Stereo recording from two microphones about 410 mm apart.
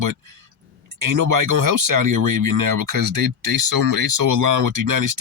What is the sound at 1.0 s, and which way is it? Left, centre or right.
Speech, right.